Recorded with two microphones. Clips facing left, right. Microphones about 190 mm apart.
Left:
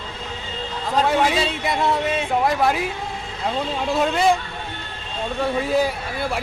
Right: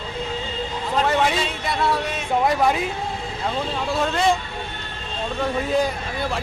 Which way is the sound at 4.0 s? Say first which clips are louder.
Left 2 dB; 5° left (ahead or behind).